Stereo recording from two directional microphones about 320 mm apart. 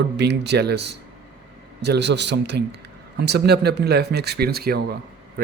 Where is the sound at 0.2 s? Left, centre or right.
Right.